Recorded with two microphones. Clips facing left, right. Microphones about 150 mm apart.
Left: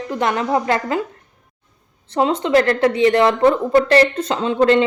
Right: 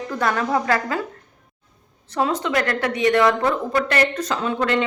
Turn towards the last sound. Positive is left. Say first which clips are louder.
# left 7 dB
turn(degrees=30)  # may be behind; listen again after turning